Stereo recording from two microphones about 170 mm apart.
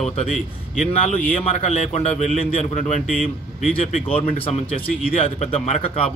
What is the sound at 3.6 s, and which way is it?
Speech, 35° left (ahead or behind).